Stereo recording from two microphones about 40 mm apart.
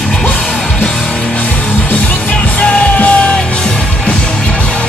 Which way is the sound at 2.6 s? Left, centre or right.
Left.